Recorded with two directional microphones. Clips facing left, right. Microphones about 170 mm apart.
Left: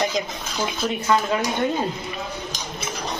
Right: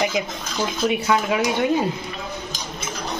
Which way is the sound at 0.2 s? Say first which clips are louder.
Right 1 dB; 10° right (ahead or behind).